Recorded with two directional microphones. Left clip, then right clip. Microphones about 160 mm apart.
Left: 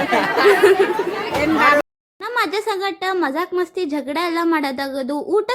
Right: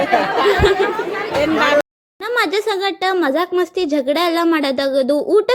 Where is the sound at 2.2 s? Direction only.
20° right (ahead or behind).